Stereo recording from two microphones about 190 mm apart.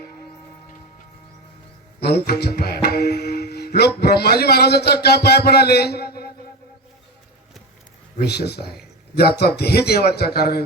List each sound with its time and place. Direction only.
2.0 s tabla: 60° left (ahead or behind)
8.2 s tabla: 60° left (ahead or behind)